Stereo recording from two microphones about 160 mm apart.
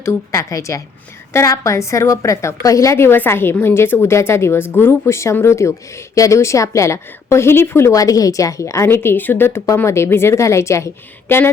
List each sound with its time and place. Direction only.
0.0 s a woman's voice: 20° left (ahead or behind)